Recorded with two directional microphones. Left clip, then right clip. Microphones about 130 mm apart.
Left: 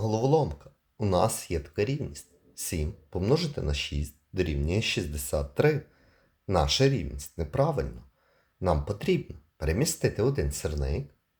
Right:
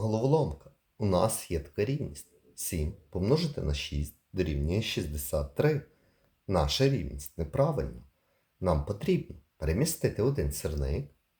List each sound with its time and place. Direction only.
0.0 s speech: 25° left (ahead or behind)